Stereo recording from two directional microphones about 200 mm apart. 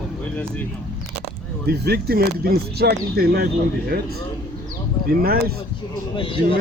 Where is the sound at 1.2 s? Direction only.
55° right (ahead or behind).